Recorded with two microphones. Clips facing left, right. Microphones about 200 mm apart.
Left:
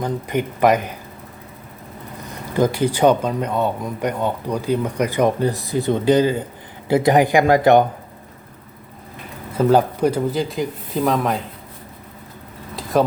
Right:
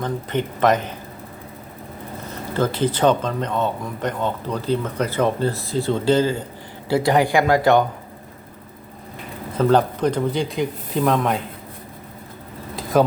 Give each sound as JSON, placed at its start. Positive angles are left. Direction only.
{"t": 0.0, "sound": "speech", "side_deg": 10}
{"t": 2.5, "sound": "a woman's voice", "side_deg": 15}
{"t": 9.6, "sound": "speech", "side_deg": 10}
{"t": 12.7, "sound": "insect", "side_deg": 0}